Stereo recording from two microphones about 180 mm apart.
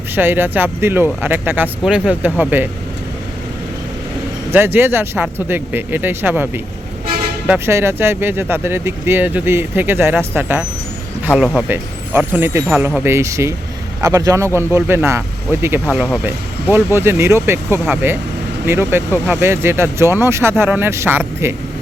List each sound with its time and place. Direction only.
0.2 s speech: 10° right (ahead or behind)
4.5 s speech: 10° right (ahead or behind)
16.2 s speech: 10° right (ahead or behind)